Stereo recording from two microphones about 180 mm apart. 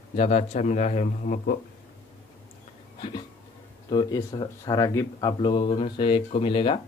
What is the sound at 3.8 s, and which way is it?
Speech, 25° left (ahead or behind).